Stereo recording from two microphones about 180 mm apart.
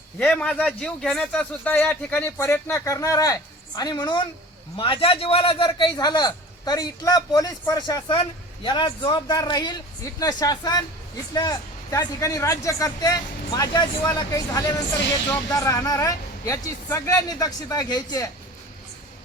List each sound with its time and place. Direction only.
0.2 s a man's voice: 5° left (ahead or behind); by 18.3 s 20° left (ahead or behind)